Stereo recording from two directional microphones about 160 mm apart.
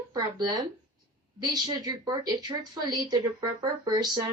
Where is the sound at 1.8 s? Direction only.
25° right (ahead or behind).